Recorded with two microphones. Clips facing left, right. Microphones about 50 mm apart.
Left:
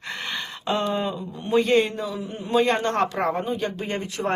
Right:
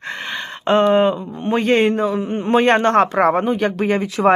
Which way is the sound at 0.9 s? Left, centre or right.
Right.